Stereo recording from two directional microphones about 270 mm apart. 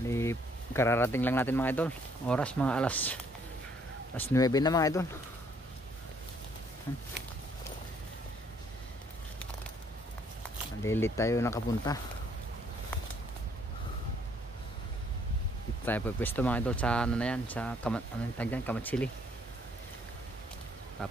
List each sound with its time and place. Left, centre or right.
0.1 s speech: centre
4.3 s speech: centre
10.8 s speech: centre
15.8 s speech: centre
21.0 s speech: centre